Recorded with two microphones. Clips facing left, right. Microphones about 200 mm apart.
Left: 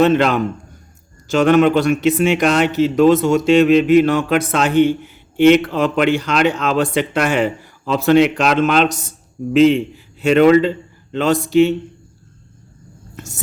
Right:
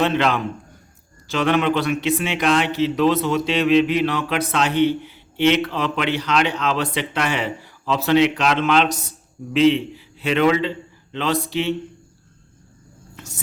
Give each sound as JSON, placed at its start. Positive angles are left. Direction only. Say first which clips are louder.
{"t": 0.0, "sound": "a man's voice", "louder": "left 6 dB", "side_deg": 45}
{"t": 13.1, "sound": "music", "louder": "left 5 dB", "side_deg": 45}